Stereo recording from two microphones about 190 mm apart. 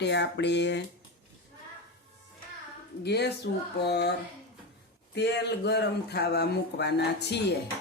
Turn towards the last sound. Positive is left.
turn(degrees=60)  # may be behind; listen again after turning